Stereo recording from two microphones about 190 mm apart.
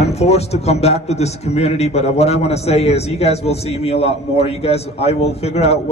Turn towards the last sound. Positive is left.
turn(degrees=35)  # may be behind; listen again after turning